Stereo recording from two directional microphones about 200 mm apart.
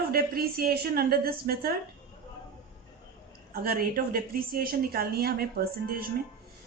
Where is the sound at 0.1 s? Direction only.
50° right (ahead or behind).